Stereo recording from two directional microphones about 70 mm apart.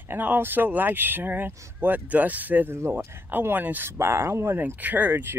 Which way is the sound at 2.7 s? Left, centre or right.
Right.